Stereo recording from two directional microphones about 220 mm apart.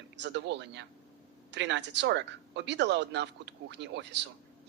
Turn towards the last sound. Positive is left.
turn(degrees=-50)  # may be behind; listen again after turning